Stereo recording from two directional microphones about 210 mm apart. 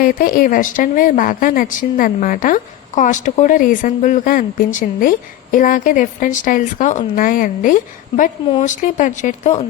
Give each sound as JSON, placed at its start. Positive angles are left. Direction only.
{"t": 0.0, "sound": "speech", "side_deg": 40}